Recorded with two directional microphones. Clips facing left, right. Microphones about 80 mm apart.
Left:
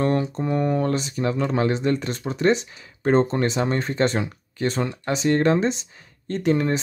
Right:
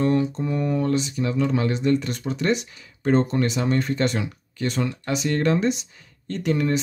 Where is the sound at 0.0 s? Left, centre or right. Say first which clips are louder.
Right 1 dB; left.